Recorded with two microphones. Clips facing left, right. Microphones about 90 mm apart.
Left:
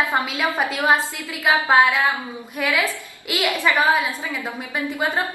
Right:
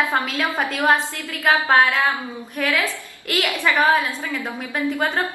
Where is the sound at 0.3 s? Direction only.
5° left (ahead or behind).